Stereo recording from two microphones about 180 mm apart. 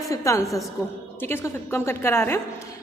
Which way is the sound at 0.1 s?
15° left (ahead or behind).